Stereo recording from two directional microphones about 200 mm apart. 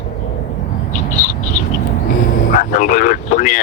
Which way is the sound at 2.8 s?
40° left (ahead or behind).